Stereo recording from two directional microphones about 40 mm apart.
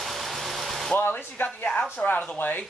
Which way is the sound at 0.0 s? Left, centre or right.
Centre.